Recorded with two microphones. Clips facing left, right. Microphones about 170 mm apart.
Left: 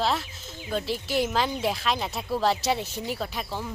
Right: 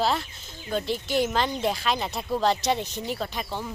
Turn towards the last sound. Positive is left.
turn(degrees=0)  # may be behind; listen again after turning